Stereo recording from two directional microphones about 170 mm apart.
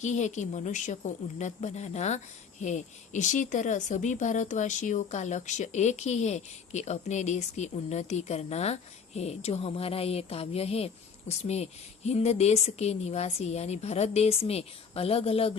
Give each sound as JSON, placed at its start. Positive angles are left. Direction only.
{"t": 0.0, "sound": "speech", "side_deg": 45}